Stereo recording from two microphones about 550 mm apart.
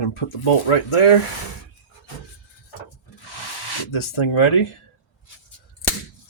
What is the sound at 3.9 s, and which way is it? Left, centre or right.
Speech, left.